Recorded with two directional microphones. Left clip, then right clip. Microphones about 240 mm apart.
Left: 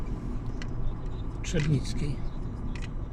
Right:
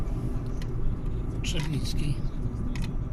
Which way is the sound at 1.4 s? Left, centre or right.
Left.